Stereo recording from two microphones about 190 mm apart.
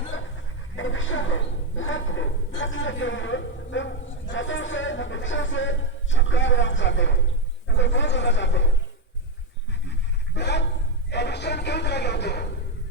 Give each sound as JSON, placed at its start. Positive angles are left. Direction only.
{"t": 0.8, "sound": "a woman's voice", "side_deg": 90}
{"t": 9.8, "sound": "pant", "side_deg": 65}
{"t": 11.1, "sound": "a sound", "side_deg": 65}